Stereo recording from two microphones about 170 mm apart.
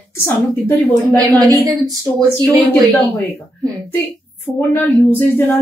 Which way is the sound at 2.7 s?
15° left (ahead or behind).